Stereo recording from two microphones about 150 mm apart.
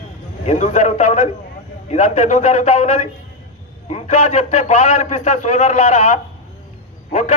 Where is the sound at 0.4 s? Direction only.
50° left (ahead or behind).